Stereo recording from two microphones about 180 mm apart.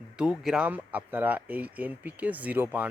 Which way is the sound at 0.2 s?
5° right (ahead or behind).